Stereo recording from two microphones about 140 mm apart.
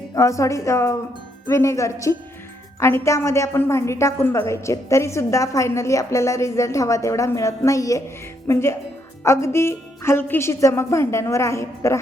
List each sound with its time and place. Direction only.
0.1 s a woman's voice: 20° left (ahead or behind)